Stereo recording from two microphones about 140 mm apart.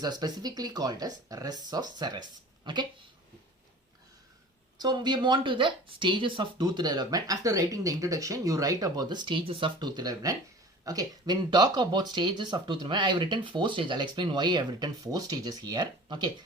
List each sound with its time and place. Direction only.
0.0 s speech: 30° right (ahead or behind)
4.8 s speech: 30° right (ahead or behind)